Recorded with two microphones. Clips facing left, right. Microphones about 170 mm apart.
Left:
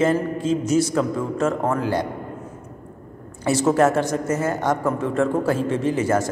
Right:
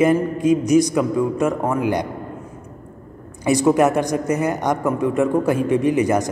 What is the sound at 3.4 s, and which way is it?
A man's voice, 15° right (ahead or behind).